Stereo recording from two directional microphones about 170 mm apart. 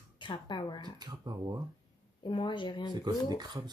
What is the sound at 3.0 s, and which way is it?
Speech, 25° right (ahead or behind).